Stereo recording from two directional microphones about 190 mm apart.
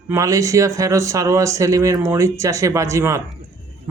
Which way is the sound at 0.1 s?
15° right (ahead or behind).